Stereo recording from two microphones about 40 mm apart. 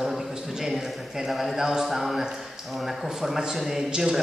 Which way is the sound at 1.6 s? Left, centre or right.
Centre.